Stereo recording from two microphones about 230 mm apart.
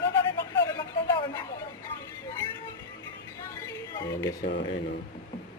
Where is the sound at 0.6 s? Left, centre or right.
Centre.